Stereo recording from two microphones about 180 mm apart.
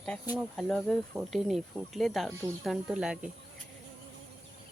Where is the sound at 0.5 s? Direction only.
5° left (ahead or behind).